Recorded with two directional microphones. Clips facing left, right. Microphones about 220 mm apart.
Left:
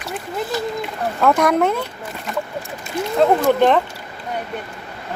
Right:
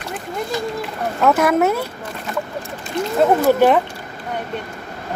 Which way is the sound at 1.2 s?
5° right (ahead or behind).